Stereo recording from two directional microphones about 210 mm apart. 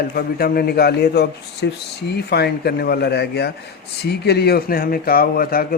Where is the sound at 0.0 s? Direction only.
45° left (ahead or behind).